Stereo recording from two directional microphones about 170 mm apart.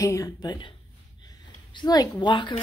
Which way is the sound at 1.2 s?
25° left (ahead or behind).